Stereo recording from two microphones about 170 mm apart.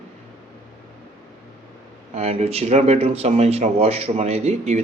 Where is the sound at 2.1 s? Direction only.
40° right (ahead or behind).